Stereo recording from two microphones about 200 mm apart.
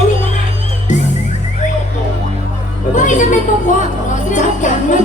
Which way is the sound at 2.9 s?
40° left (ahead or behind).